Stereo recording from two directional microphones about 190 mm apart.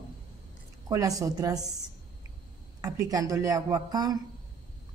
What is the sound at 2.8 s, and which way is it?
A woman's voice, 20° right (ahead or behind).